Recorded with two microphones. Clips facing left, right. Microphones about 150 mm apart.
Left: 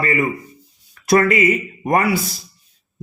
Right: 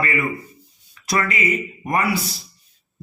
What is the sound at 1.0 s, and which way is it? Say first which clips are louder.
A man's voice: left 8 dB; 50° left (ahead or behind).